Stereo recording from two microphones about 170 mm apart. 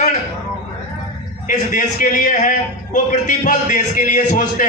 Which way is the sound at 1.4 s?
50° left (ahead or behind).